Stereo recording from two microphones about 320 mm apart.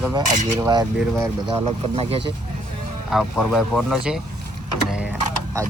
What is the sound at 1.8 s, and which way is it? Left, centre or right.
Speech, centre.